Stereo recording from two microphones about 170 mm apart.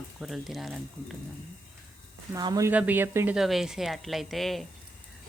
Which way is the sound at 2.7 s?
10° right (ahead or behind).